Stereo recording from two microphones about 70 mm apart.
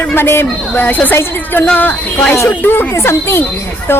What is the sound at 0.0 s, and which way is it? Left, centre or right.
A woman's voice, left.